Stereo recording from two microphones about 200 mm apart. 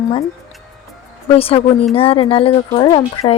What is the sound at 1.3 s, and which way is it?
Speech, 30° left (ahead or behind).